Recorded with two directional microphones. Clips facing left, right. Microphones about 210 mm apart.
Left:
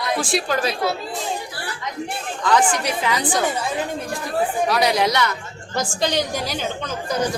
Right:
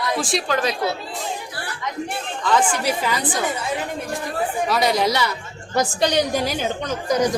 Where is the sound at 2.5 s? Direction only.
5° right (ahead or behind).